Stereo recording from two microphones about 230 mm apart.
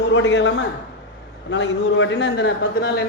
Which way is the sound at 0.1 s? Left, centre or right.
Left.